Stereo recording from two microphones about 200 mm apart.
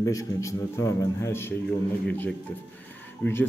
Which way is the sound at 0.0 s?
15° left (ahead or behind).